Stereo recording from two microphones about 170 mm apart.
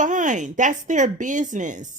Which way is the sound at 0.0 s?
50° right (ahead or behind).